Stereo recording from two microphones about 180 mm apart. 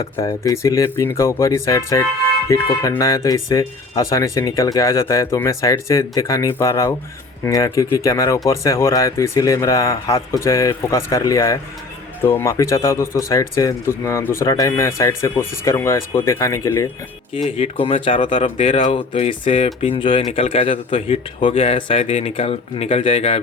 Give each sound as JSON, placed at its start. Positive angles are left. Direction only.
{"t": 0.0, "sound": "speech", "side_deg": 20}
{"t": 17.3, "sound": "speech", "side_deg": 30}